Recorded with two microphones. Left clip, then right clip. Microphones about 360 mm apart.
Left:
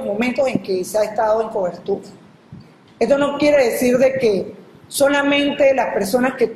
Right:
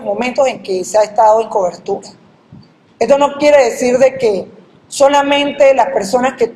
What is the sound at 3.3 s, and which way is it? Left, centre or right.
A woman's voice, centre.